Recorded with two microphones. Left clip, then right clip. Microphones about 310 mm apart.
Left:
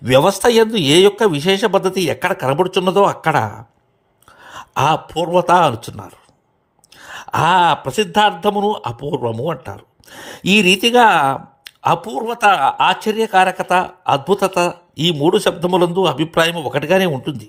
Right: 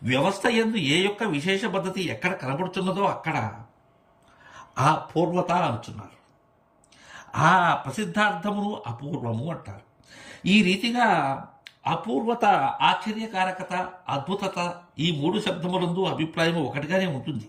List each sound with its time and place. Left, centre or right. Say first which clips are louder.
0.0 s speech: left 11 dB; centre
4.8 s speech: left 6 dB; centre
7.8 s speech: left 11 dB; centre
11.0 s speech: left 7 dB; left
11.6 s speech: left 12 dB; centre